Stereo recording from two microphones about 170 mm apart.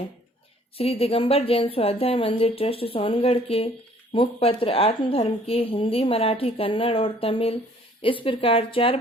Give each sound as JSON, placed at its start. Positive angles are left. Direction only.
{"t": 0.8, "sound": "a woman's voice", "side_deg": 35}